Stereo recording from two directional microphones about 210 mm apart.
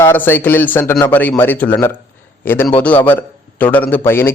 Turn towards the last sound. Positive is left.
turn(degrees=10)  # may be behind; listen again after turning